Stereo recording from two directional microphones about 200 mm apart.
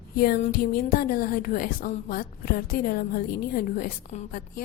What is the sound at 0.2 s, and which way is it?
A woman's voice, 45° left (ahead or behind).